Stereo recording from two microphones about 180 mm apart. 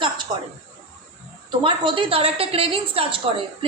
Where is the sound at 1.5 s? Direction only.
25° right (ahead or behind).